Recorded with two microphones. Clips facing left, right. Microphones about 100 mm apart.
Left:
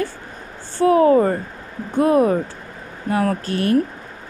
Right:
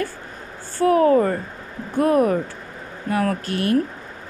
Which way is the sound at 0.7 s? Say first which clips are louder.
Left 2 dB; 20° left (ahead or behind).